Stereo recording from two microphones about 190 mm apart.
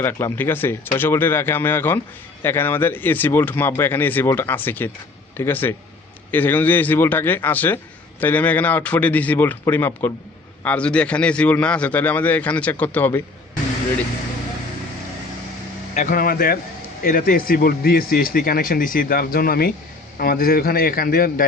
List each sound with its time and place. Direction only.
0.0 s a man's voice: 10° left (ahead or behind)
16.0 s speech: 45° left (ahead or behind)